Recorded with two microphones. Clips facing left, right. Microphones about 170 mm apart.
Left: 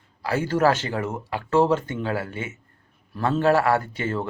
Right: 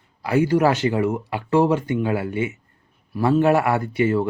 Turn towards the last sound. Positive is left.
turn(degrees=-15)  # may be behind; listen again after turning